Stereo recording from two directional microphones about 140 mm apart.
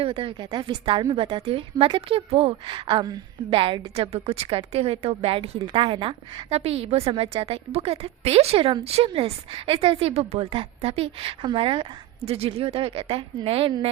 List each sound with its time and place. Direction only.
0.0 s a woman's voice: 40° right (ahead or behind)